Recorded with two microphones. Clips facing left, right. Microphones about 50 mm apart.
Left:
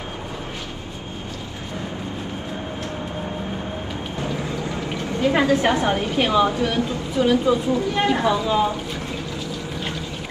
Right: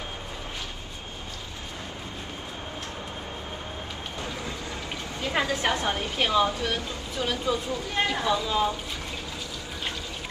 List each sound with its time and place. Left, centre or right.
5.3 s speech: left